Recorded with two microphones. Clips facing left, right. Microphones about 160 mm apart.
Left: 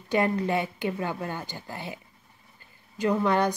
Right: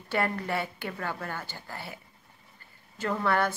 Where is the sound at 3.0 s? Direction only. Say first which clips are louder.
Left 4 dB; 15° left (ahead or behind).